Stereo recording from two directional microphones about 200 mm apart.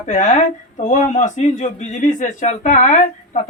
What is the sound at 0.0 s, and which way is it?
Speech, 35° left (ahead or behind).